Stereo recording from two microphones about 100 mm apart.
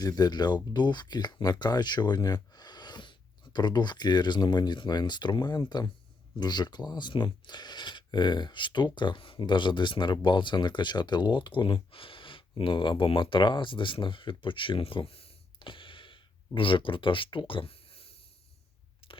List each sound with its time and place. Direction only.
0.0 s speech: 40° left (ahead or behind); by 18.1 s 75° left (ahead or behind)